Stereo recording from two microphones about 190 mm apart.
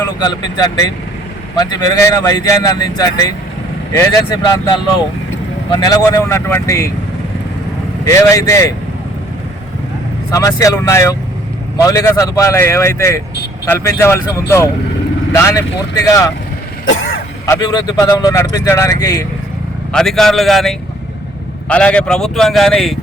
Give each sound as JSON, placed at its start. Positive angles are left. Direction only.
{"t": 0.2, "sound": "a man's voice", "side_deg": 20}
{"t": 8.0, "sound": "a man's voice", "side_deg": 15}
{"t": 10.3, "sound": "a man's voice", "side_deg": 15}
{"t": 16.9, "sound": "throat clearing", "side_deg": 50}
{"t": 17.4, "sound": "a man's voice", "side_deg": 20}
{"t": 19.9, "sound": "speech", "side_deg": 5}